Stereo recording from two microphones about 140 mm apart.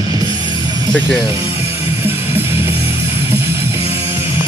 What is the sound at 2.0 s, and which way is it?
Music, 15° right (ahead or behind).